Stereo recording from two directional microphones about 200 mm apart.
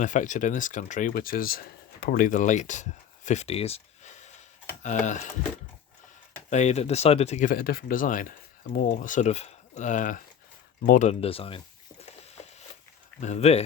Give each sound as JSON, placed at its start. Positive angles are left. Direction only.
{"t": 0.0, "sound": "speech", "side_deg": 40}
{"t": 6.5, "sound": "speech", "side_deg": 35}
{"t": 10.8, "sound": "a sound", "side_deg": 40}
{"t": 13.1, "sound": "speech", "side_deg": 35}